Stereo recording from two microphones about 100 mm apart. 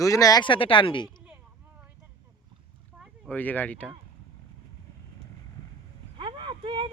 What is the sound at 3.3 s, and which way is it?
Speech, 15° left (ahead or behind).